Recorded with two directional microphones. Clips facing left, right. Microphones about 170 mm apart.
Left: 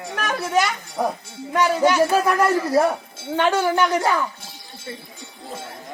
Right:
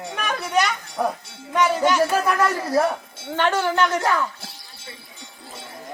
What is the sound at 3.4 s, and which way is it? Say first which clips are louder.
Speech: left 2 dB; 10° left (ahead or behind).